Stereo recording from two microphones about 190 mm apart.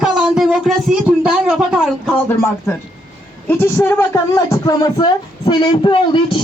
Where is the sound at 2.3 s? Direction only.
10° left (ahead or behind).